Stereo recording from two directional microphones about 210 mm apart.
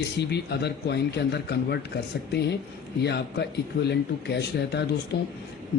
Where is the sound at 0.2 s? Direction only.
50° left (ahead or behind).